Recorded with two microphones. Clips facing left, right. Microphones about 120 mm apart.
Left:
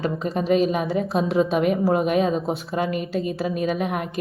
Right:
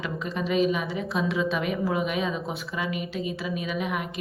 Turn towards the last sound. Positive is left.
turn(degrees=40)  # may be behind; listen again after turning